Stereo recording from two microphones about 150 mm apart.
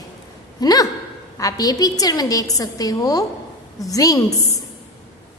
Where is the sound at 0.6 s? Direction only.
25° left (ahead or behind).